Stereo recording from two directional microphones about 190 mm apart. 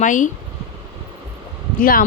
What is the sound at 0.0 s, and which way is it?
Speech, 40° left (ahead or behind).